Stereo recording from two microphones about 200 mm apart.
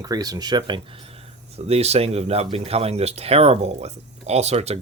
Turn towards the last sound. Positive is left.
turn(degrees=-30)  # may be behind; listen again after turning